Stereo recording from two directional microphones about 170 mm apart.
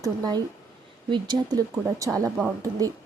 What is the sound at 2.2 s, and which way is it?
Speech, centre (ahead or behind).